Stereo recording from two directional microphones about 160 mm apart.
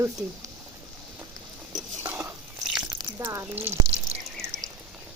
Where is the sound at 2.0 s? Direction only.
15° right (ahead or behind).